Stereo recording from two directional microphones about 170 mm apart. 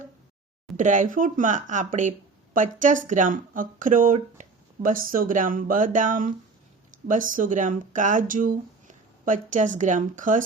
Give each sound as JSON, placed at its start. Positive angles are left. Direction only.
{"t": 0.8, "sound": "speech", "side_deg": -50}